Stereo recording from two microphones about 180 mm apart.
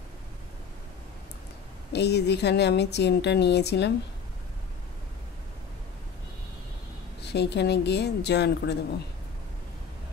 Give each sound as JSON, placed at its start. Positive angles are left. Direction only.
{"t": 1.9, "sound": "a woman's voice", "side_deg": 70}
{"t": 7.2, "sound": "a woman's voice", "side_deg": 70}